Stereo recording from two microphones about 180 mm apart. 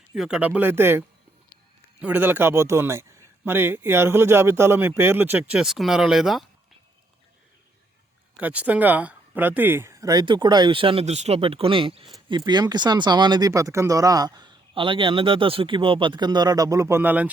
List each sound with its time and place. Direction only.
0.1 s a man's voice: 5° right (ahead or behind)
8.4 s speech: 10° right (ahead or behind)